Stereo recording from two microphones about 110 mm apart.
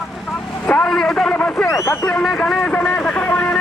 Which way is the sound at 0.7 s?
15° left (ahead or behind).